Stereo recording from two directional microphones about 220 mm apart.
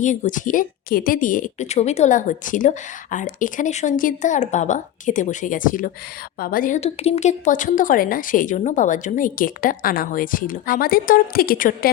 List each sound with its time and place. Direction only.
0.0 s a woman's voice: 35° left (ahead or behind)